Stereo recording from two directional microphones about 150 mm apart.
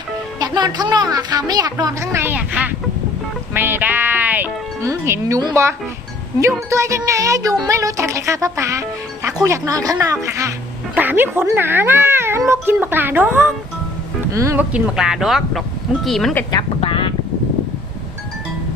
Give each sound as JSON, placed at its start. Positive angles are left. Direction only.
{"t": 0.3, "sound": "speech", "side_deg": -25}
{"t": 3.5, "sound": "music", "side_deg": -15}
{"t": 5.4, "sound": "speech", "side_deg": -25}
{"t": 16.5, "sound": "speech", "side_deg": 35}